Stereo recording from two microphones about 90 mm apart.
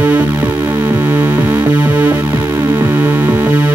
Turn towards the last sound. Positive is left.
turn(degrees=-20)  # may be behind; listen again after turning